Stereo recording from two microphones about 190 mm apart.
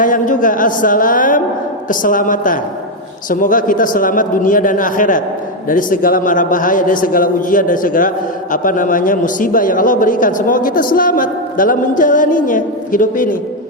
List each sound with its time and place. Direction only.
0.0 s a man's voice: 45° left (ahead or behind)